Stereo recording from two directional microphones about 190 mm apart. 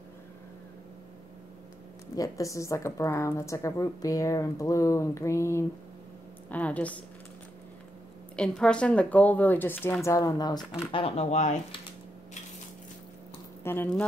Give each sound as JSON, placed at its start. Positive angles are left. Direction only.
{"t": 2.1, "sound": "a woman's voice", "side_deg": 20}
{"t": 8.4, "sound": "a woman's voice", "side_deg": 5}
{"t": 13.7, "sound": "a woman's voice", "side_deg": 10}